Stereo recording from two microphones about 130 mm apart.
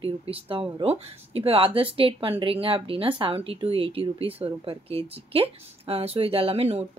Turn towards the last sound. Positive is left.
turn(degrees=-55)  # may be behind; listen again after turning